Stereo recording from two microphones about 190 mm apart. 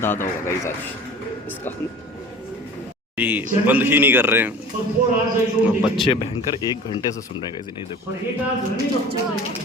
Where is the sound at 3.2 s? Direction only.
10° right (ahead or behind).